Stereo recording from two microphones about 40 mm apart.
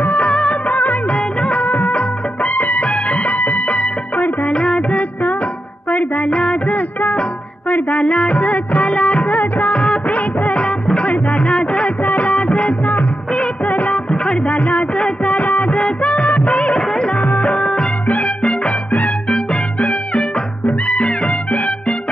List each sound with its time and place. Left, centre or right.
0.0 s music of bollywood: left
0.3 s music of bollywood: left
1.7 s music of bollywood: left
2.0 s music: left
5.9 s music: left
9.4 s music of bollywood: left
12.0 s music: left
13.3 s music of bollywood: left
14.1 s music: left
15.0 s music of bollywood: left
18.0 s music: left